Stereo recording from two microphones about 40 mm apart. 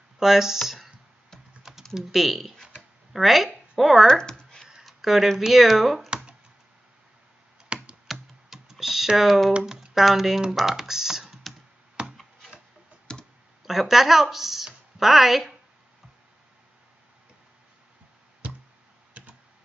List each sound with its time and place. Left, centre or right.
0.2 s speech: centre
2.0 s a woman's voice: centre
4.1 s a sound: centre
4.8 s a sound: centre
5.4 s speech: centre
7.7 s computer keyboard: right
8.1 s computer keyboard: centre
9.6 s speech: centre
12.0 s a sound: right
13.1 s clicking: left
13.7 s a woman's voice: centre